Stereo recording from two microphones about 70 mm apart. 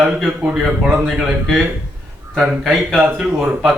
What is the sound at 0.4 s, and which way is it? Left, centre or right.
Speech, centre.